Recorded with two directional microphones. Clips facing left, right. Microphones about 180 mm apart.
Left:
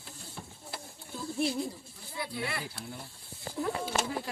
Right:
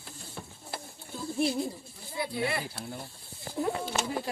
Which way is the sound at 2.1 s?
20° right (ahead or behind).